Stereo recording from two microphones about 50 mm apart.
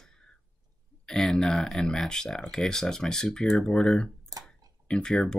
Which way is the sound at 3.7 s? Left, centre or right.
Centre.